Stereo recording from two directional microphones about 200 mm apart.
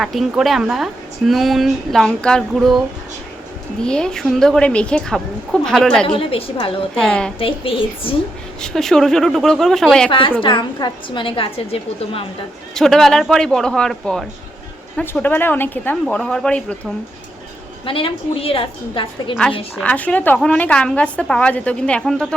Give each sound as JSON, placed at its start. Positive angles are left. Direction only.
{"t": 0.0, "sound": "a woman's voice", "side_deg": 0}
{"t": 6.1, "sound": "a woman's voice", "side_deg": 25}
{"t": 7.0, "sound": "a woman's voice", "side_deg": 5}
{"t": 7.3, "sound": "a woman's voice", "side_deg": 25}
{"t": 8.6, "sound": "a woman's voice", "side_deg": 0}
{"t": 10.1, "sound": "a woman's voice", "side_deg": 25}
{"t": 12.7, "sound": "a woman's voice", "side_deg": 0}
{"t": 17.8, "sound": "a woman's voice", "side_deg": 25}
{"t": 19.8, "sound": "a woman's voice", "side_deg": 5}